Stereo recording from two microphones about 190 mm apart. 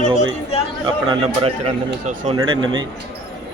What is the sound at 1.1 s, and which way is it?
A man's voice, 30° right (ahead or behind).